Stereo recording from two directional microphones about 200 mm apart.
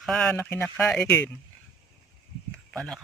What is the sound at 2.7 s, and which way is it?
Speech, 5° left (ahead or behind).